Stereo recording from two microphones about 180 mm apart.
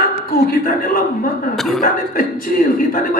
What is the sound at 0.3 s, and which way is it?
Speech, 55° left (ahead or behind).